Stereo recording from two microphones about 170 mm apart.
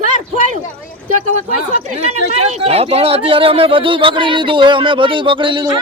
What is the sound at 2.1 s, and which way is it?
Speech, 40° right (ahead or behind).